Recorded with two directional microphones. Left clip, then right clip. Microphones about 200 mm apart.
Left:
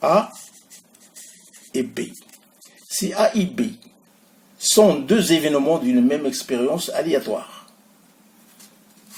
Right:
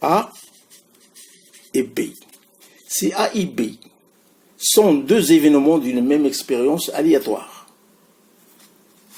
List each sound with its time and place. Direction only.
0.0 s speech: 40° right (ahead or behind)
1.7 s speech: 40° right (ahead or behind)
4.6 s speech: 40° right (ahead or behind)